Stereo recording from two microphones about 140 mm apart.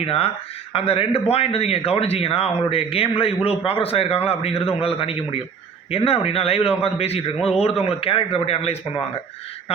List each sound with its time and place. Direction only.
0.0 s a man's voice: 45° left (ahead or behind)